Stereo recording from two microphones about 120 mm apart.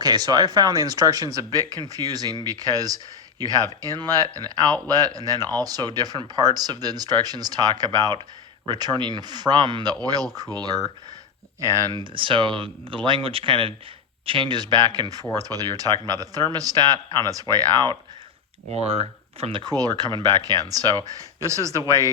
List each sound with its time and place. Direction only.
0.0 s speech: 35° right (ahead or behind)
12.1 s speech: 45° right (ahead or behind)
18.7 s speech: 60° right (ahead or behind)
19.6 s speech: 30° right (ahead or behind)